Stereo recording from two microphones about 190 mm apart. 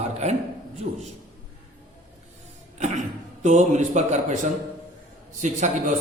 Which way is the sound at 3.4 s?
40° right (ahead or behind).